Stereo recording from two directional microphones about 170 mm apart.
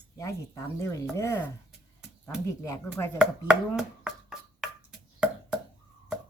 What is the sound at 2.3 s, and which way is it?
Speech, 5° right (ahead or behind).